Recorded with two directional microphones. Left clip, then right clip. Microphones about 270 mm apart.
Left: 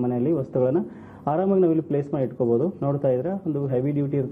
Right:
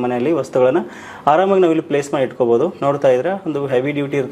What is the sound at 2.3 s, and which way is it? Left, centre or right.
Speech, right.